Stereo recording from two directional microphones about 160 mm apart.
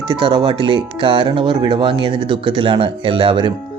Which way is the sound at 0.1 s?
30° right (ahead or behind).